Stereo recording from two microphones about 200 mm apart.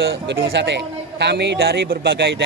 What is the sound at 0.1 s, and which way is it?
A man's voice, 60° right (ahead or behind).